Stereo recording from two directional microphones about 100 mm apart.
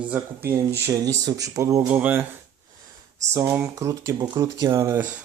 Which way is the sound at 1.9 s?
15° right (ahead or behind).